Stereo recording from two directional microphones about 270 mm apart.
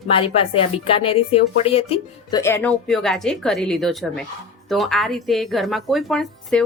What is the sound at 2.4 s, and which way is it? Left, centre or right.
A woman's voice, centre.